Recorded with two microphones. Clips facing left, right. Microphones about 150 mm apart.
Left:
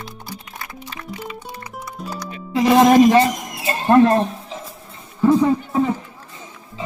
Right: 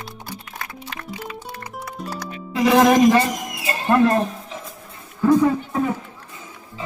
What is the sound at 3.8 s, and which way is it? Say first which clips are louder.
Speech: left 4 dB; 30° left (ahead or behind).